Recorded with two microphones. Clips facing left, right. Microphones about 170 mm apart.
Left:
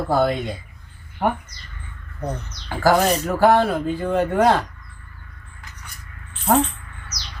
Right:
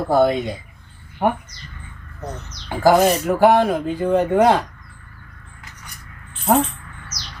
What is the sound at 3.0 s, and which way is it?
Speech, 15° right (ahead or behind).